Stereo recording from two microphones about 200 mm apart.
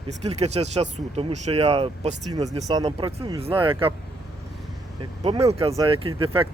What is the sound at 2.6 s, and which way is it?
Speech, 20° right (ahead or behind).